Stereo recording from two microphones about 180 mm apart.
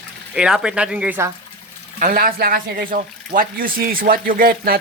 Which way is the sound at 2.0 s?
50° right (ahead or behind).